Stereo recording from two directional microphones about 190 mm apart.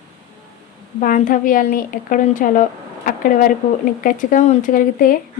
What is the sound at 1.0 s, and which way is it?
Speech, 45° left (ahead or behind).